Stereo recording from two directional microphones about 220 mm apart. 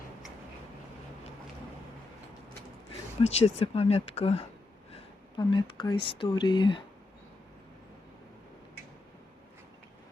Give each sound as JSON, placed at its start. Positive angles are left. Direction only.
{"t": 3.2, "sound": "speech", "side_deg": 30}